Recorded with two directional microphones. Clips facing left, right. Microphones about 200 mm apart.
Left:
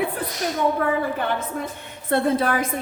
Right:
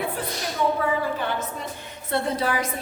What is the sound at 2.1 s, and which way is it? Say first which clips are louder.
Speech: left 4 dB; 55° left (ahead or behind).